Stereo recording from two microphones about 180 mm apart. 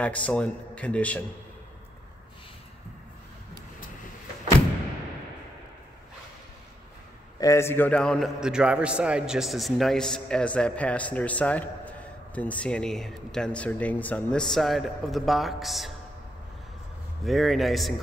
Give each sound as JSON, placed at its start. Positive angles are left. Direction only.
{"t": 0.0, "sound": "speech", "side_deg": 5}
{"t": 7.3, "sound": "a man's voice", "side_deg": 15}
{"t": 17.2, "sound": "a man's voice", "side_deg": 0}